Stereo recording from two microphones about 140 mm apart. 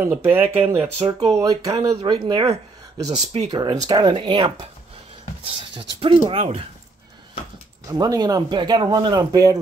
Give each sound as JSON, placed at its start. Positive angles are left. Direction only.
{"t": 0.0, "sound": "speech", "side_deg": -15}
{"t": 0.9, "sound": "speech", "side_deg": -45}
{"t": 1.3, "sound": "speech", "side_deg": -25}
{"t": 2.0, "sound": "speech", "side_deg": -35}
{"t": 3.5, "sound": "speech", "side_deg": -30}
{"t": 7.9, "sound": "speech", "side_deg": -30}